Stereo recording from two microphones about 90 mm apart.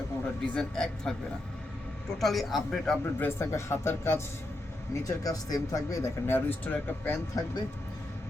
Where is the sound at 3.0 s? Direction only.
25° left (ahead or behind).